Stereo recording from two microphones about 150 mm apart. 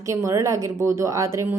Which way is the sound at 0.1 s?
20° right (ahead or behind).